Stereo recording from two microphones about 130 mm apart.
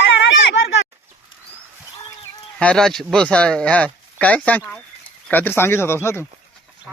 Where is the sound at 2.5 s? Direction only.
5° left (ahead or behind).